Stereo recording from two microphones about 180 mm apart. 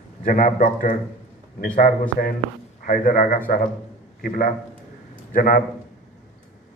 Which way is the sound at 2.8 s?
50° left (ahead or behind).